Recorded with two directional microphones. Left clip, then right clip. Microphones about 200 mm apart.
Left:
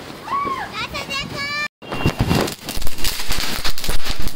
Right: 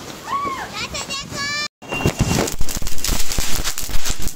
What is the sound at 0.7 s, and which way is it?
Children playing, 40° left (ahead or behind).